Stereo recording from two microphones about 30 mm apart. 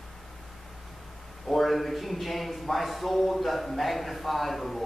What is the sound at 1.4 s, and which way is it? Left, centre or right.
A man's voice, centre.